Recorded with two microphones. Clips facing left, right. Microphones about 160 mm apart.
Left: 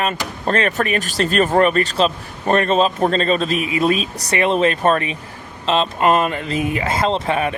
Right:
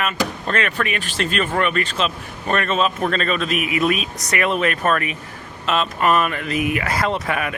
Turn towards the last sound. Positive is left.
turn(degrees=30)  # may be behind; listen again after turning